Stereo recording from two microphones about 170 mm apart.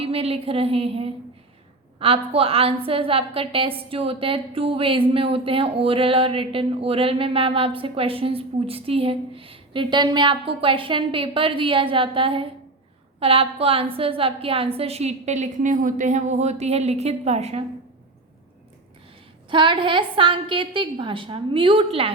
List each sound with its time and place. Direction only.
0.0 s a woman's voice: 35° right (ahead or behind)
19.5 s a woman's voice: 30° right (ahead or behind)